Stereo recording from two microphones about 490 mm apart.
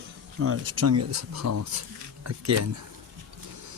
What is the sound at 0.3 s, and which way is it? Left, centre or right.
Speech, right.